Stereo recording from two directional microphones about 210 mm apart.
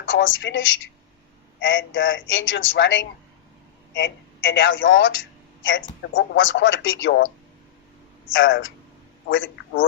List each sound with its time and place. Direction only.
0.1 s a man's voice: 65° left (ahead or behind)
8.3 s a man's voice: 65° left (ahead or behind)